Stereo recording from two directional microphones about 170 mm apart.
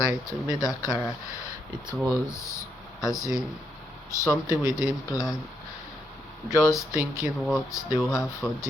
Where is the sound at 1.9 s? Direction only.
5° right (ahead or behind).